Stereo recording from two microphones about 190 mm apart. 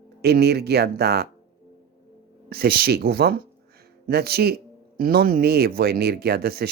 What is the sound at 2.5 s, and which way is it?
Speech, 55° right (ahead or behind).